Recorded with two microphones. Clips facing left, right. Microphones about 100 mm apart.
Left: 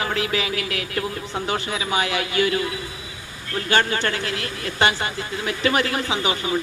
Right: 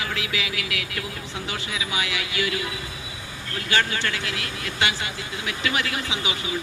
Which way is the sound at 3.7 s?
40° left (ahead or behind).